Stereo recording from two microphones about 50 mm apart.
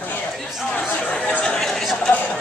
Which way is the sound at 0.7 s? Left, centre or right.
Left.